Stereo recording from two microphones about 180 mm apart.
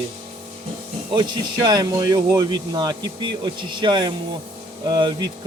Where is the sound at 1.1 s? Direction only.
25° right (ahead or behind).